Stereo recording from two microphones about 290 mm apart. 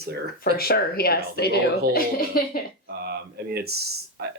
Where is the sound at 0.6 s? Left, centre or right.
Left.